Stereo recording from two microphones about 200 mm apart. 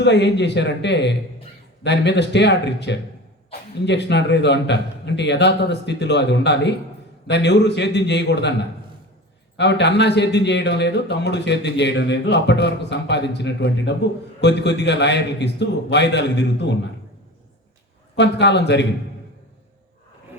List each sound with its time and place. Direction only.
0.0 s a man's voice: 60° left (ahead or behind)
9.6 s a man's voice: 60° left (ahead or behind)
18.2 s a man's voice: 60° left (ahead or behind)